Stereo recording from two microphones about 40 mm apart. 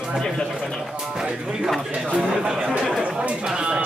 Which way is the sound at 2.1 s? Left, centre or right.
Right.